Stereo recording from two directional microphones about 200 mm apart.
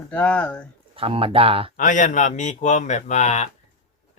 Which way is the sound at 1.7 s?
40° left (ahead or behind).